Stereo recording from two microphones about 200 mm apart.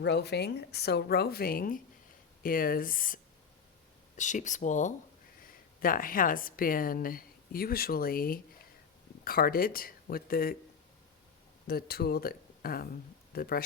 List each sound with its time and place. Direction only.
0.0 s a woman's voice: 60° left (ahead or behind)
4.2 s a woman's voice: 40° left (ahead or behind)
11.7 s a woman's voice: 50° left (ahead or behind)